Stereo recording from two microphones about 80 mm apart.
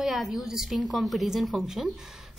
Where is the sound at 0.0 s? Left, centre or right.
Centre.